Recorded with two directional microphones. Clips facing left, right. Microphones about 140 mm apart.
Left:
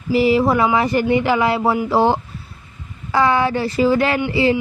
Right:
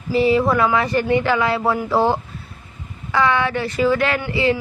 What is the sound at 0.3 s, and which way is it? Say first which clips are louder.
A woman's voice: left 1 dB; 25° left (ahead or behind).